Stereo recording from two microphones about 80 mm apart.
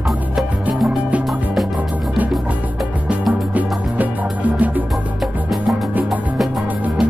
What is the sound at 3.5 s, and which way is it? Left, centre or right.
Music, centre.